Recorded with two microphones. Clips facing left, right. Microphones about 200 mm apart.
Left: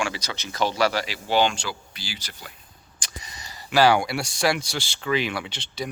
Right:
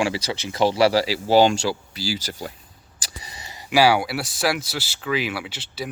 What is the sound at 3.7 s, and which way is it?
Speech, 10° right (ahead or behind).